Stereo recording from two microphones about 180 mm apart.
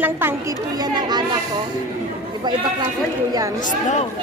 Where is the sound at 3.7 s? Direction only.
40° left (ahead or behind).